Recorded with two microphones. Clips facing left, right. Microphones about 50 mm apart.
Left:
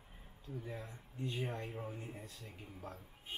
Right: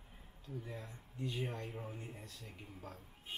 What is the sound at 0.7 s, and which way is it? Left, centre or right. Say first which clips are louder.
Speech: left 2 dB; centre.